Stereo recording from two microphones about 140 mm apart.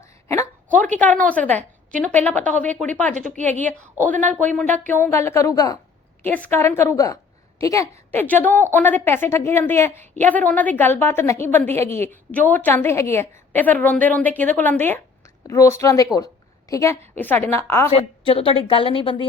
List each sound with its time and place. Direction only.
0.0 s a sound: 20° left (ahead or behind)
0.7 s a sound: 65° right (ahead or behind)
0.9 s a woman's voice: 10° left (ahead or behind)
3.2 s a woman's voice: 65° right (ahead or behind)
4.1 s a woman's voice: 10° left (ahead or behind)
6.2 s a woman's voice: 10° left (ahead or behind)
17.9 s a woman's voice: 40° left (ahead or behind)